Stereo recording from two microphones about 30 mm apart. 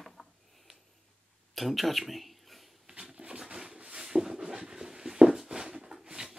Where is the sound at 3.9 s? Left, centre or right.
Right.